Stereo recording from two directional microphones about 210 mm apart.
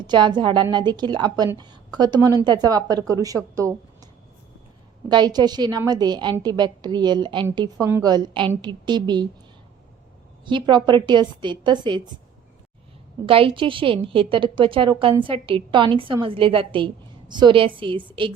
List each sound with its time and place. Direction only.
0.0 s a woman's voice: 20° right (ahead or behind)
5.0 s a woman's voice: 20° right (ahead or behind)
10.4 s a woman's voice: 20° right (ahead or behind)
13.2 s a woman's voice: 25° right (ahead or behind)